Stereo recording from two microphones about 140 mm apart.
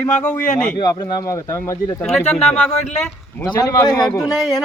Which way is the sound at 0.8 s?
30° left (ahead or behind).